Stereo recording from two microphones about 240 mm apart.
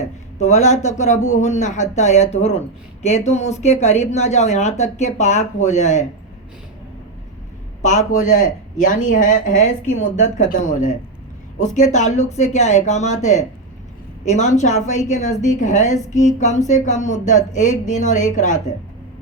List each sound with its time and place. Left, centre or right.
0.3 s speech: left
7.8 s speech: left